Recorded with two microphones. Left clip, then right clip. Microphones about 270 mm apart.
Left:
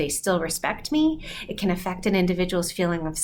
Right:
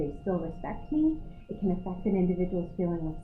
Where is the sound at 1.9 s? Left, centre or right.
Centre.